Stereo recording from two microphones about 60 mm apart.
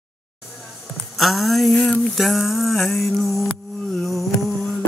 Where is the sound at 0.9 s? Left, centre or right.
Centre.